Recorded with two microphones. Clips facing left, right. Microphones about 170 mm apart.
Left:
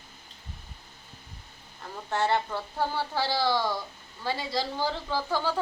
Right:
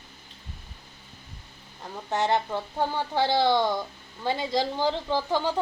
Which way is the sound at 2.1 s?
20° right (ahead or behind).